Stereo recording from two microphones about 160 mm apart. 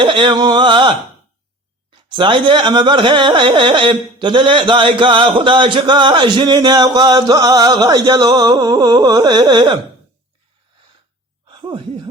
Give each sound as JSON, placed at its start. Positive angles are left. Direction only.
{"t": 0.0, "sound": "music", "side_deg": -30}
{"t": 2.0, "sound": "speech", "side_deg": -30}
{"t": 5.8, "sound": "music", "side_deg": -30}
{"t": 11.4, "sound": "a sound", "side_deg": -30}